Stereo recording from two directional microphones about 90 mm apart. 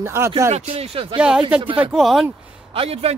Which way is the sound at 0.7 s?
90° right.